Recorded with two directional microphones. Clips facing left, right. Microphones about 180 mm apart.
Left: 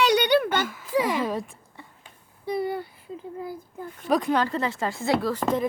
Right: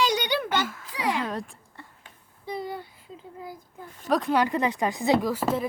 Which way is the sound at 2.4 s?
60° left (ahead or behind).